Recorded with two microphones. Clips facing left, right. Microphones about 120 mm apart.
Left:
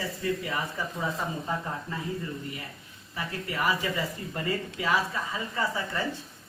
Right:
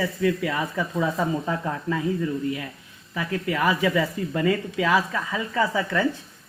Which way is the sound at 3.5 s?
90° right.